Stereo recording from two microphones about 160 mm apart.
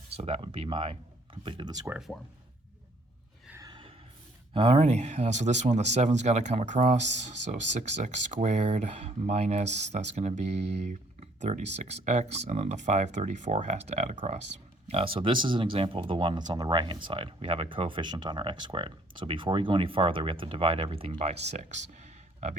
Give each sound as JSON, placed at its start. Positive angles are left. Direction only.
{"t": 0.2, "sound": "speech", "side_deg": -40}
{"t": 3.6, "sound": "neigh", "side_deg": -30}
{"t": 4.5, "sound": "speech", "side_deg": -40}
{"t": 14.8, "sound": "speech", "side_deg": -35}